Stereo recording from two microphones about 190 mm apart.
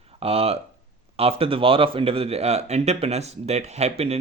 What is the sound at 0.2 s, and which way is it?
Speech, 30° right (ahead or behind).